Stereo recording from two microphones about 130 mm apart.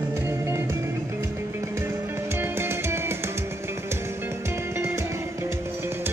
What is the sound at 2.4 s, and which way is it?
Music, 20° right (ahead or behind).